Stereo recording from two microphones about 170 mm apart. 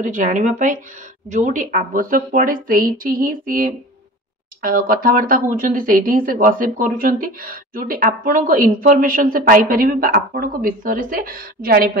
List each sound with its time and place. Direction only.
0.0 s speech: 45° right (ahead or behind)